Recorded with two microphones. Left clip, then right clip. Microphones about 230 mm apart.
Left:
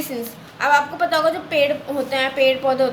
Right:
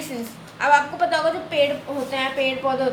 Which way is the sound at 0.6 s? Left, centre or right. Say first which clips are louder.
Left 1 dB; centre.